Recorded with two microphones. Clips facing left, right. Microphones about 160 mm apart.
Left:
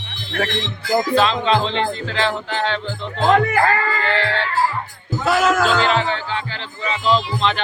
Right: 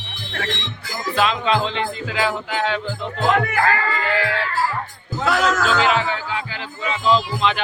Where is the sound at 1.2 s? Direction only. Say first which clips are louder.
Left 2 dB; 5° right (ahead or behind).